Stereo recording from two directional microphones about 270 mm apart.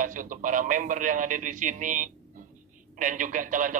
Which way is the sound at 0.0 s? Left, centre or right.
Right.